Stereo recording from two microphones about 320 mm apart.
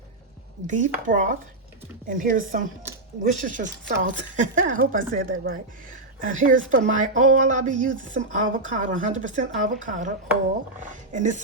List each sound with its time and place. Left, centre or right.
0.7 s speech: right
11.1 s speech: right